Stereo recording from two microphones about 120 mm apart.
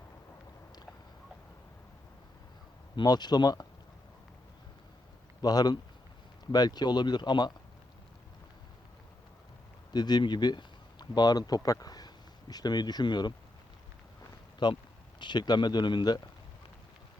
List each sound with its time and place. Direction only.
2.9 s speech: 35° left (ahead or behind)
5.4 s speech: 35° left (ahead or behind)
9.9 s speech: 35° left (ahead or behind)
14.6 s speech: 40° left (ahead or behind)